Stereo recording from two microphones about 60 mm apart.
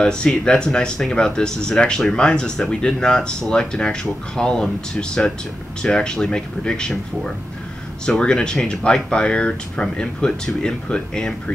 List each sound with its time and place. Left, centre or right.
0.0 s speech: centre